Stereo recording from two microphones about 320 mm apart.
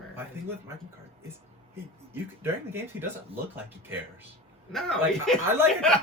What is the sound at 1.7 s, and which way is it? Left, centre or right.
Speech, centre.